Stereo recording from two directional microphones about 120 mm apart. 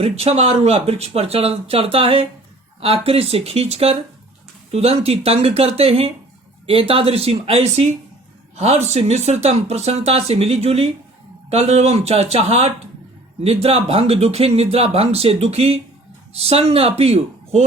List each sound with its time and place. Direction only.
0.0 s speech: 60° right (ahead or behind)